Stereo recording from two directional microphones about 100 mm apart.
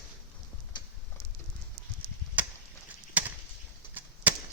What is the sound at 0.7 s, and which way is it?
Clip-clop, 45° left (ahead or behind).